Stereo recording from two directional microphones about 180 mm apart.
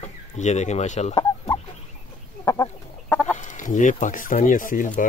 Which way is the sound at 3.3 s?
45° left (ahead or behind).